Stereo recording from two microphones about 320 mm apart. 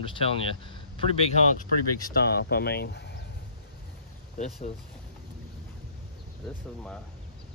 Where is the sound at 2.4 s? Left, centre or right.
Left.